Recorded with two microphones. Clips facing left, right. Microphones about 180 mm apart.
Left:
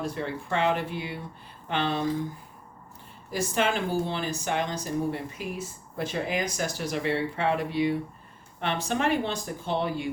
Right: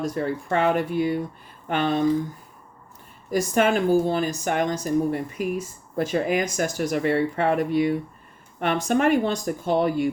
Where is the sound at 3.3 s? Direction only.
45° right (ahead or behind).